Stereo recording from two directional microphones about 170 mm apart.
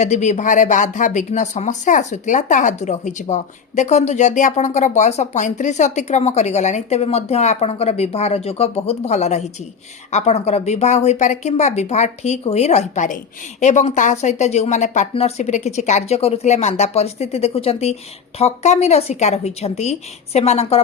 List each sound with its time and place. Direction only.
0.0 s speech: 45° left (ahead or behind)